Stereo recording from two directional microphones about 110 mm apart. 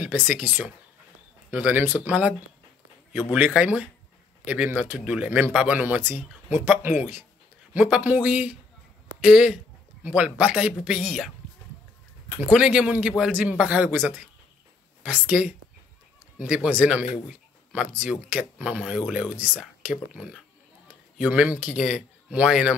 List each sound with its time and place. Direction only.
0.0 s a man's voice: 15° right (ahead or behind)
12.4 s a man's voice: 10° right (ahead or behind)